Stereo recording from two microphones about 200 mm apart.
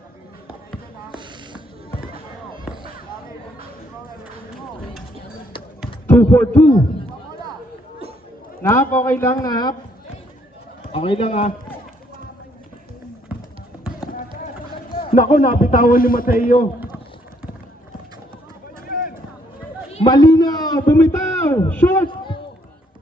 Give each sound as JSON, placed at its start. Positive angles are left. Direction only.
{"t": 1.9, "sound": "fireworks", "side_deg": 45}
{"t": 6.1, "sound": "a man's voice", "side_deg": 10}
{"t": 8.6, "sound": "a man's voice", "side_deg": 10}
{"t": 10.9, "sound": "a man's voice", "side_deg": 30}
{"t": 14.0, "sound": "basketball bounce", "side_deg": 45}
{"t": 15.1, "sound": "a man's voice", "side_deg": 45}
{"t": 18.9, "sound": "a sound", "side_deg": 45}
{"t": 19.9, "sound": "a man's voice", "side_deg": 25}
{"t": 22.0, "sound": "a sound", "side_deg": 25}